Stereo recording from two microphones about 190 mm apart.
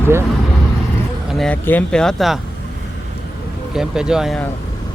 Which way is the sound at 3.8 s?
5° right (ahead or behind).